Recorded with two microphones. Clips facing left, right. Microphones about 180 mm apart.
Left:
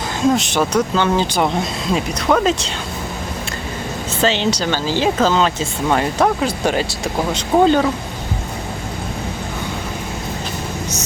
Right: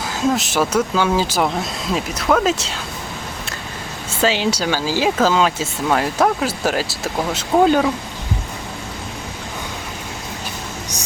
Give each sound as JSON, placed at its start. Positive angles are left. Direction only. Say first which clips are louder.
{"t": 0.3, "sound": "speech", "louder": "left 2 dB", "side_deg": -5}
{"t": 4.1, "sound": "speech", "louder": "even", "side_deg": -10}